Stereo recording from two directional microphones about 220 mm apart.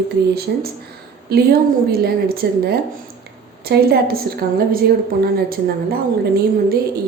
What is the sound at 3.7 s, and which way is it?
A woman's voice, 45° right (ahead or behind).